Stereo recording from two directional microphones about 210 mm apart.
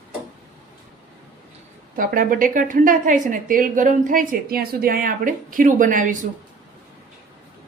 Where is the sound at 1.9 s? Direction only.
40° right (ahead or behind).